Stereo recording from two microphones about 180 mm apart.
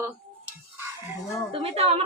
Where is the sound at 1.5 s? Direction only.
35° right (ahead or behind).